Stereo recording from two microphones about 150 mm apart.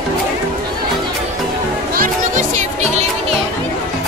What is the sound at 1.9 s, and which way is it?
Music, 65° right (ahead or behind).